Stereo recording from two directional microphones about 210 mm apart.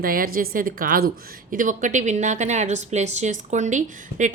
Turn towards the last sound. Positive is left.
turn(degrees=-35)  # may be behind; listen again after turning